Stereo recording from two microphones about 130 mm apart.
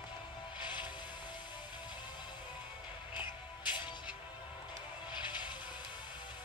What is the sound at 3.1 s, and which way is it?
Music, 35° left (ahead or behind).